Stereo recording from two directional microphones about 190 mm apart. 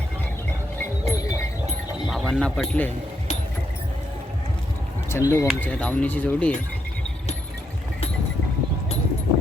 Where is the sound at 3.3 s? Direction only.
40° left (ahead or behind).